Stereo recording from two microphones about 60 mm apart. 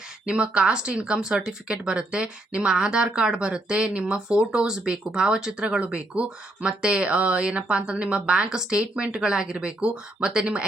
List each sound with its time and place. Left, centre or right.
0.3 s speech: centre